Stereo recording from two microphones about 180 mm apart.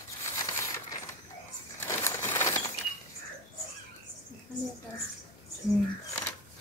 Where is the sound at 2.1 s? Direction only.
15° left (ahead or behind).